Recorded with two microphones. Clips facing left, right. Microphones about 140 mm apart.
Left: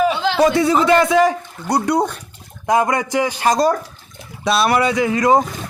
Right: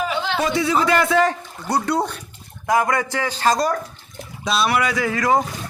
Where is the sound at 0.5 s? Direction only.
45° left (ahead or behind).